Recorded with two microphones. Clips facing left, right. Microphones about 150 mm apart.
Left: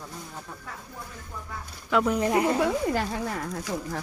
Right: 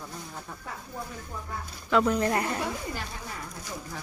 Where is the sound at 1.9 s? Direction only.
15° left (ahead or behind).